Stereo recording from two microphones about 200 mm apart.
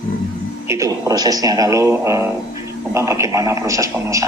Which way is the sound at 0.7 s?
15° right (ahead or behind).